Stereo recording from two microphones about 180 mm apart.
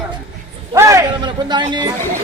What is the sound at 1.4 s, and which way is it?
Speech, 25° right (ahead or behind).